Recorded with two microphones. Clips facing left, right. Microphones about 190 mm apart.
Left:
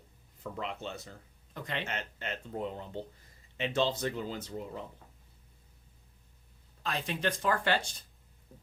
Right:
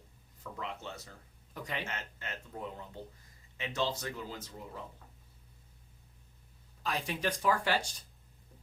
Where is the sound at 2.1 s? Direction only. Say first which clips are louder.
Left 6 dB; 25° left (ahead or behind).